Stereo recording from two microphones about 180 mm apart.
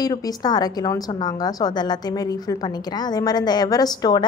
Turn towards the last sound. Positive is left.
turn(degrees=20)  # may be behind; listen again after turning